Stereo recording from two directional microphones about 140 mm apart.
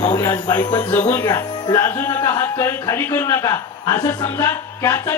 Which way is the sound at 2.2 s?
20° left (ahead or behind).